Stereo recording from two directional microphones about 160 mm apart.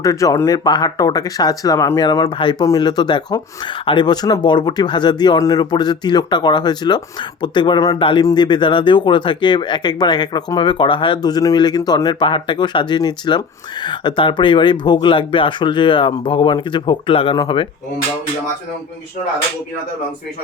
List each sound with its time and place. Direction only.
0.0 s speech: 20° left (ahead or behind)